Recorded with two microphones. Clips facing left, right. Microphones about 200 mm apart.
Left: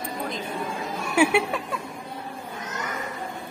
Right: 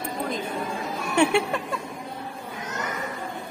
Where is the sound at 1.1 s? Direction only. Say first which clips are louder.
Even; 5° left (ahead or behind).